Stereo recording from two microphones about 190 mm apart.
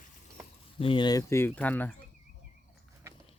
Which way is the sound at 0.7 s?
25° left (ahead or behind).